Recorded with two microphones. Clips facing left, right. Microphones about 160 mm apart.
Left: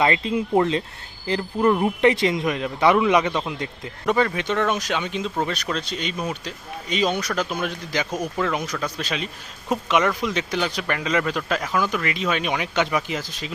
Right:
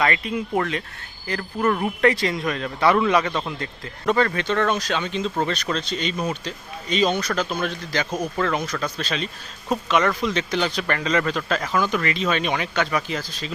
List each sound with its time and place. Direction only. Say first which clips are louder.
0.0 s speech: left 2 dB; 25° left (ahead or behind)